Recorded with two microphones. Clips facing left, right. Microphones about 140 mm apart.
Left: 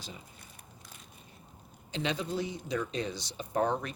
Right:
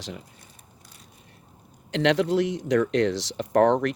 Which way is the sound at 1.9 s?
80° right.